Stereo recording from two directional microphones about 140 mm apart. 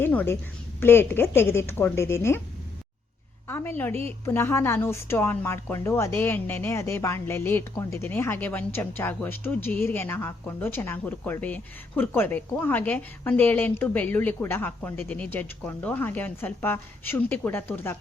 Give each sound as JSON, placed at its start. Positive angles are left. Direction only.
{"t": 0.0, "sound": "a sound", "side_deg": 15}
{"t": 0.8, "sound": "a woman's voice", "side_deg": 15}
{"t": 3.5, "sound": "a woman's voice", "side_deg": 15}